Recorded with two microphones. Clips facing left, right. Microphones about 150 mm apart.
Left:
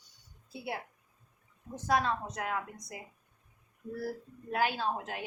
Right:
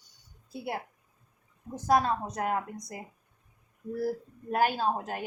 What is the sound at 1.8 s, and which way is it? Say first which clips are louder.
Speech: right 4 dB; 40° right (ahead or behind).